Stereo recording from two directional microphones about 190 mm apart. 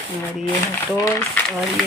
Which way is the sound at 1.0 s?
15° left (ahead or behind).